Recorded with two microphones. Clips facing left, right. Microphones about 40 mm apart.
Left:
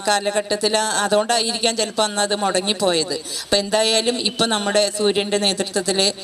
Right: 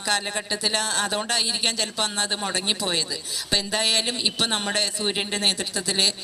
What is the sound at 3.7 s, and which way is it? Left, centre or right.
Speech, left.